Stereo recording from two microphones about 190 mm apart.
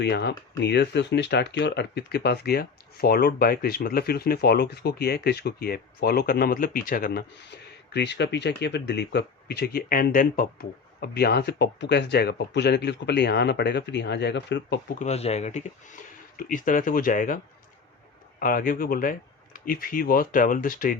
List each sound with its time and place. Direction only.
0.0 s speech: 60° left (ahead or behind)
14.9 s speech: 35° left (ahead or behind)